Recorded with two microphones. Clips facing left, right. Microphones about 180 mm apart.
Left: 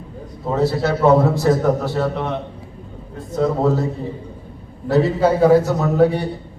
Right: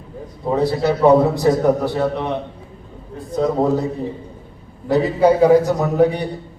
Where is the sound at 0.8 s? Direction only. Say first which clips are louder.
Right 2 dB; 15° right (ahead or behind).